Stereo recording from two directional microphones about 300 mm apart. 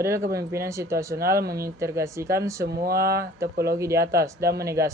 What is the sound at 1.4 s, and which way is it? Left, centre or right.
Speech, right.